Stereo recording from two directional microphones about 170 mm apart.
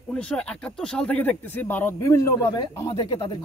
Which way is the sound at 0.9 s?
5° left (ahead or behind).